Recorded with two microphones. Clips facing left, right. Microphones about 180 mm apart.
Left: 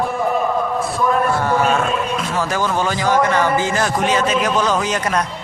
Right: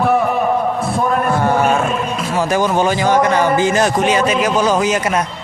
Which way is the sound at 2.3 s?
15° right (ahead or behind).